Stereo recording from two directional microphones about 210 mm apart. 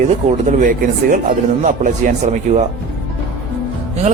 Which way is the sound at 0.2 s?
35° right (ahead or behind).